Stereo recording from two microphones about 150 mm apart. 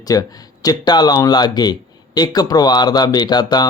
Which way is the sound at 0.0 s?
25° left (ahead or behind).